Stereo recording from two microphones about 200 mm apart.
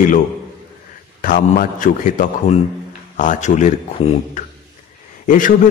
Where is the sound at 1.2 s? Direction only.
45° left (ahead or behind).